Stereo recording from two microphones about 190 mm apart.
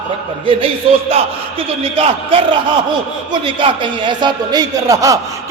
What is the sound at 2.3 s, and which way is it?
A man's voice, 30° right (ahead or behind).